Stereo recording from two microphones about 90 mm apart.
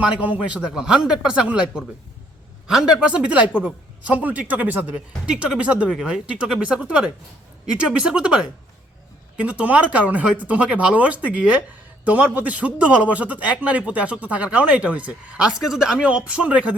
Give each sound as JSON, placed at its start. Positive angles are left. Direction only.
{"t": 0.0, "sound": "a man's voice", "side_deg": -15}